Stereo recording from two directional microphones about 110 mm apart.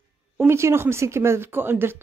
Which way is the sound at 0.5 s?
25° right (ahead or behind).